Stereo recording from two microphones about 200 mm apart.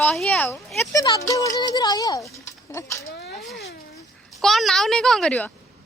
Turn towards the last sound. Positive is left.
turn(degrees=5)  # may be behind; listen again after turning